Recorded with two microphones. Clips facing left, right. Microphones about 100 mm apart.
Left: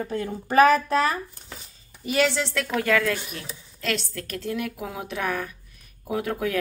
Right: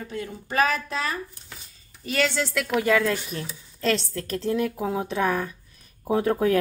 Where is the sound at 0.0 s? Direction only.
40° left (ahead or behind).